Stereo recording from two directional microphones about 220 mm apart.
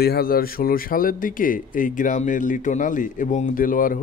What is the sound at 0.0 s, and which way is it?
Speech, 45° left (ahead or behind).